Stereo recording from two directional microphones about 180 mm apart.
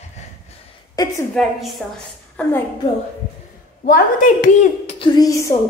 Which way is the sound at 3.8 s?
50° left (ahead or behind).